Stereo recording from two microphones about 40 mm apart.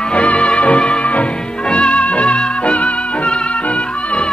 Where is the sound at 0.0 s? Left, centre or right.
Left.